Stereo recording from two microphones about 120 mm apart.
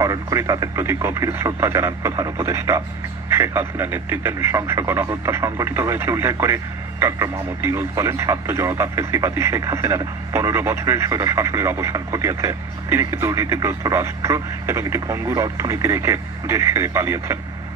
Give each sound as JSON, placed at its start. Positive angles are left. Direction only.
{"t": 0.0, "sound": "speech", "side_deg": -30}